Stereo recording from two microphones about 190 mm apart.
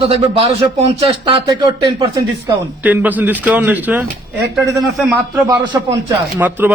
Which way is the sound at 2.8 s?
10° right (ahead or behind).